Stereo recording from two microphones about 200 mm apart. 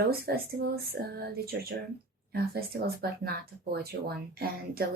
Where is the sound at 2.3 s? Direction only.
50° right (ahead or behind).